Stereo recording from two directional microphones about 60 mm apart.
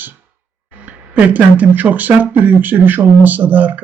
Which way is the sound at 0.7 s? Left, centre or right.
Right.